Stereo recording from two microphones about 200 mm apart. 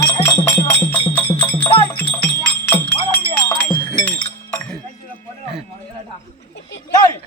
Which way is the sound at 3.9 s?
5° left (ahead or behind).